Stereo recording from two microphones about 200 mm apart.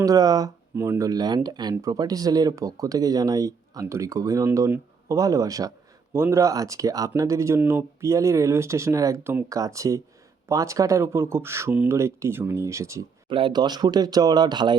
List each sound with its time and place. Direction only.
0.0 s speech: 20° right (ahead or behind)